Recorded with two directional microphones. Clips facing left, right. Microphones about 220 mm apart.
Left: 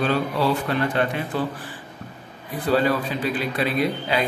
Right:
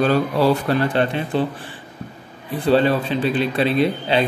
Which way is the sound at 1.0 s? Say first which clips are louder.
Right 4 dB; 25° right (ahead or behind).